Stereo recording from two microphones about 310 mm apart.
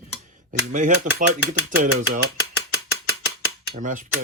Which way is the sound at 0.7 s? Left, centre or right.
Right.